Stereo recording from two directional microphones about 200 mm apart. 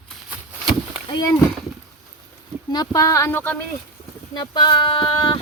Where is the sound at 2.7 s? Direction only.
20° left (ahead or behind).